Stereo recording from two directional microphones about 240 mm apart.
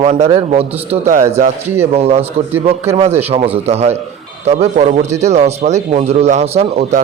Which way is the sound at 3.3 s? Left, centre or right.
Right.